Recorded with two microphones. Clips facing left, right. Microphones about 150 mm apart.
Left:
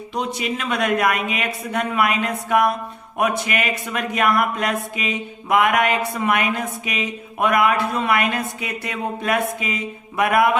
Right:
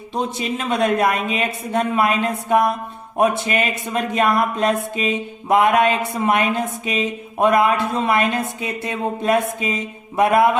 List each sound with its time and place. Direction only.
0.1 s speech: 30° right (ahead or behind)